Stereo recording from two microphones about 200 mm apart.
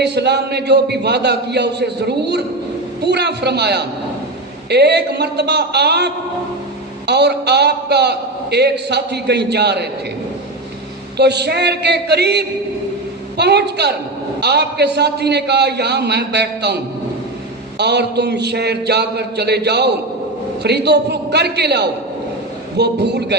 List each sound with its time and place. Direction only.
0.0 s a man's voice: 55° right (ahead or behind)
7.1 s a man's voice: 55° right (ahead or behind)
11.2 s a man's voice: 55° right (ahead or behind)
17.7 s a man's voice: 55° right (ahead or behind)